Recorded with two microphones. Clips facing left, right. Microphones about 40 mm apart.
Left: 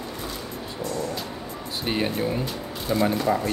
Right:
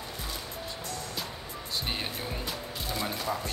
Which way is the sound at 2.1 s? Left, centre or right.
Centre.